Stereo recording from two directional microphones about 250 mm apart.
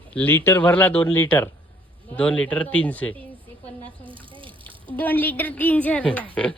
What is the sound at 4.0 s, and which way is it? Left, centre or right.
Water, centre.